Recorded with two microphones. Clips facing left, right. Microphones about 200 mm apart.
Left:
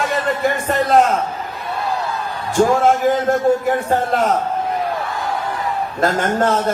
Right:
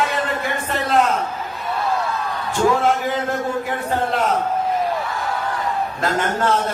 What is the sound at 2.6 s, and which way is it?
A man's voice, 45° left (ahead or behind).